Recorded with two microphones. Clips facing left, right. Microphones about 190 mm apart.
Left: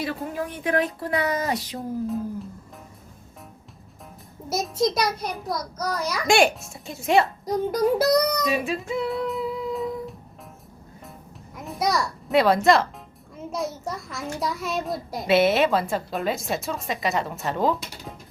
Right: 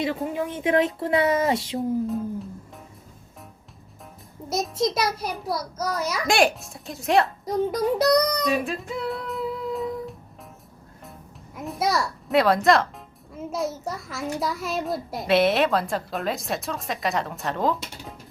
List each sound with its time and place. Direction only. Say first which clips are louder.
0.3 s a woman's voice: right 2 dB; 25° right (ahead or behind)
2.0 s a child's voice: even; centre (ahead or behind)
4.4 s a child's voice: left 1 dB; centre (ahead or behind)
11.5 s a child's voice: even; centre (ahead or behind)